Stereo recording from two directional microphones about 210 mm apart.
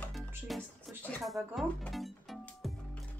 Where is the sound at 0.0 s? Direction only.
Centre (ahead or behind).